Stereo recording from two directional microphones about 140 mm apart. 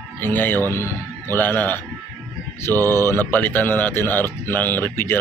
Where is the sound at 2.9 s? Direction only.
15° left (ahead or behind).